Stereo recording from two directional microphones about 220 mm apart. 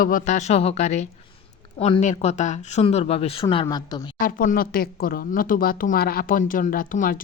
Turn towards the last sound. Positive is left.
turn(degrees=35)  # may be behind; listen again after turning